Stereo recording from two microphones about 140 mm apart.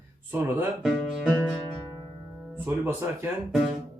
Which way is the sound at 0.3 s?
10° right (ahead or behind).